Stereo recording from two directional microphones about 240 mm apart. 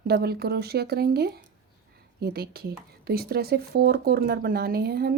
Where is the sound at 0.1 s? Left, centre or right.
Right.